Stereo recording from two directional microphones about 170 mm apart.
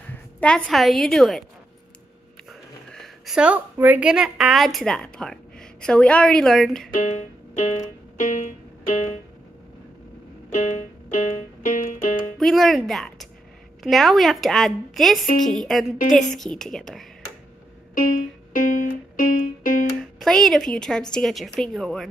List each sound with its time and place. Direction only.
0.4 s a woman's voice: 5° left (ahead or behind)
2.9 s a woman's voice: centre (ahead or behind)
6.9 s music: 45° left (ahead or behind)
10.5 s music: 45° left (ahead or behind)
12.4 s a woman's voice: centre (ahead or behind)
17.9 s music: 55° left (ahead or behind)
20.0 s a woman's voice: centre (ahead or behind)